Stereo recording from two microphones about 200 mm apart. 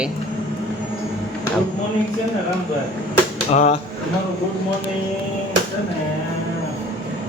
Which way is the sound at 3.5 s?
35° left (ahead or behind).